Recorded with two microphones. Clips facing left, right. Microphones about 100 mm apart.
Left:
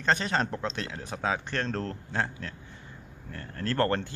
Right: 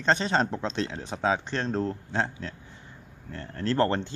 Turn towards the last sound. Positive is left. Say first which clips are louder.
# right 2 dB
turn(degrees=-20)  # may be behind; listen again after turning